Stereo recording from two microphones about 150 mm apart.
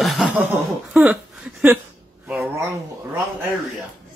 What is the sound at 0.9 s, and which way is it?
Speech, 5° right (ahead or behind).